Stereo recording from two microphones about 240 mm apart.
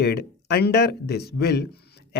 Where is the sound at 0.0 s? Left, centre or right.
Left.